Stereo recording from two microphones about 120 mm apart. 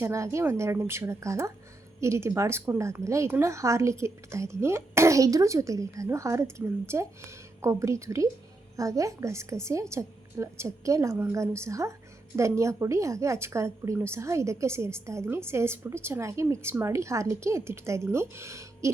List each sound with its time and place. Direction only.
0.0 s a woman's voice: 25° right (ahead or behind)